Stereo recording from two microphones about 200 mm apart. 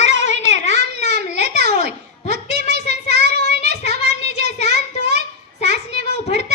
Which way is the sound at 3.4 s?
35° left (ahead or behind).